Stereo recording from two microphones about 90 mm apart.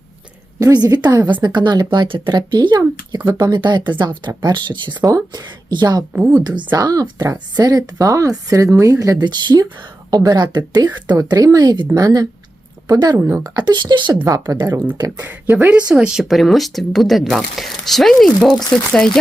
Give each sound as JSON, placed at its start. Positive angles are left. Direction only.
{"t": 0.6, "sound": "a woman's voice", "side_deg": -45}
{"t": 9.2, "sound": "a woman's voice", "side_deg": -55}
{"t": 11.2, "sound": "a woman's voice", "side_deg": -40}
{"t": 13.1, "sound": "speech", "side_deg": -30}
{"t": 13.7, "sound": "speech", "side_deg": -55}
{"t": 14.3, "sound": "a woman's voice", "side_deg": -40}
{"t": 15.2, "sound": "speech", "side_deg": -20}
{"t": 16.3, "sound": "speech", "side_deg": 0}